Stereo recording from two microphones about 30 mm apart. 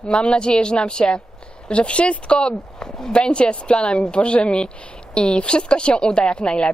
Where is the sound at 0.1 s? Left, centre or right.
Left.